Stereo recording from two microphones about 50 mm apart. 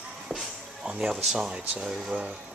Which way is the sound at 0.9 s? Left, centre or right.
Centre.